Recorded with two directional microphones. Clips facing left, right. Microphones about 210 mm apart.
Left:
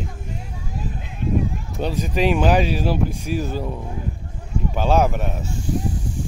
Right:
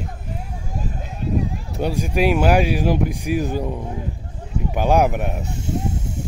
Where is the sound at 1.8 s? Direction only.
10° right (ahead or behind).